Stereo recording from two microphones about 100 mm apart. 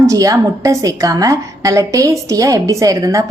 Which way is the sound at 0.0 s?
35° right (ahead or behind).